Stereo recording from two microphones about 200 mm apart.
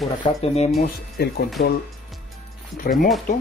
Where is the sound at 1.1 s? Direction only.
50° left (ahead or behind).